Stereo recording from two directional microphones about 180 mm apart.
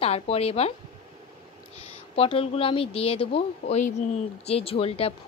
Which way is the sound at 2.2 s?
30° left (ahead or behind).